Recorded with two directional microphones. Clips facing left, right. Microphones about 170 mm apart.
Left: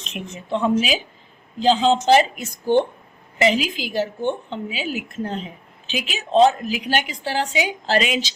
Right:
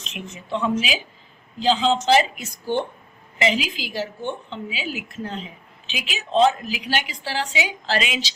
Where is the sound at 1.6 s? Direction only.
45° left (ahead or behind).